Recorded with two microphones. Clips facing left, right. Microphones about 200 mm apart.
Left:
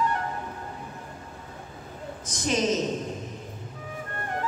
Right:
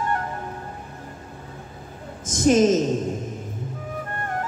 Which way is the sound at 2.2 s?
45° right (ahead or behind).